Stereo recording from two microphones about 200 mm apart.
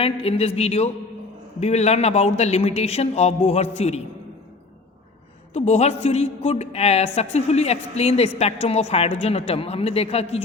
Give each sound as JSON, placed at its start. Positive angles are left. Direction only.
{"t": 0.0, "sound": "a woman's voice", "side_deg": 30}
{"t": 5.5, "sound": "a woman's voice", "side_deg": 35}